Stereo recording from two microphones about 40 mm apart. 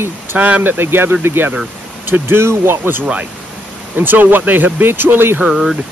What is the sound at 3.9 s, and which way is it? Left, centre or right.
Speech, right.